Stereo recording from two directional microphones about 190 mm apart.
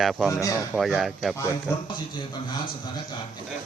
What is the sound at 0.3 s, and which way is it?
Speech, 15° left (ahead or behind).